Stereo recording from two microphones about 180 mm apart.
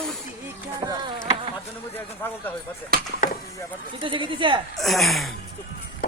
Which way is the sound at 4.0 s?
30° right (ahead or behind).